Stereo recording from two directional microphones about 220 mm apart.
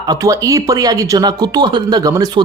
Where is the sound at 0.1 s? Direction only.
15° right (ahead or behind).